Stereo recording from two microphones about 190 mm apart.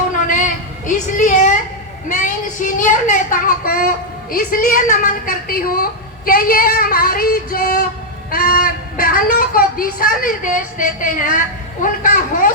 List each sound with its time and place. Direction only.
1.1 s a woman's voice: 40° left (ahead or behind)